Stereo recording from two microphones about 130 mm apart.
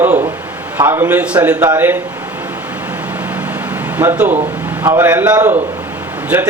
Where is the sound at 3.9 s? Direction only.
15° right (ahead or behind).